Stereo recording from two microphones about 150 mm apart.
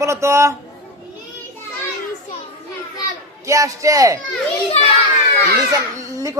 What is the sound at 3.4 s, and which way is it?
Speech, 20° right (ahead or behind).